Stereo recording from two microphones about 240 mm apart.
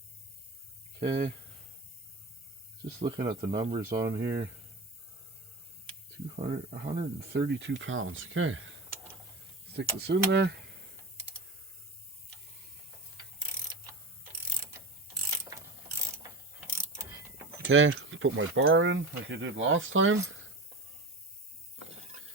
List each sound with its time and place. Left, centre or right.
0.9 s speech: right
3.0 s speech: centre
5.8 s speech: right
7.4 s speech: right
9.7 s speech: right
17.6 s speech: right